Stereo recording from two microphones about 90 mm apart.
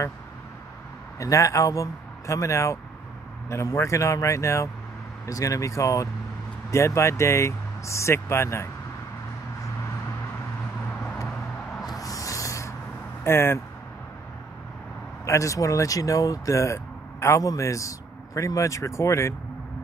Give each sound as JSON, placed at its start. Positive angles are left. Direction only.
{"t": 1.2, "sound": "speech", "side_deg": 35}
{"t": 12.0, "sound": "a sound", "side_deg": 40}
{"t": 13.2, "sound": "speech", "side_deg": 25}
{"t": 15.2, "sound": "speech", "side_deg": 35}